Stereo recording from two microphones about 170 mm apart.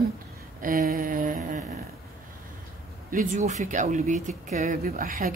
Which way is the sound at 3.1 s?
50° right (ahead or behind).